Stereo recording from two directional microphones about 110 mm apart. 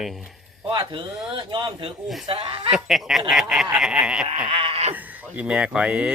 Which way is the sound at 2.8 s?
Centre (ahead or behind).